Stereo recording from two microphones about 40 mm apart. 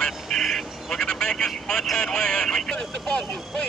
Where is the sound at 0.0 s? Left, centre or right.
Centre.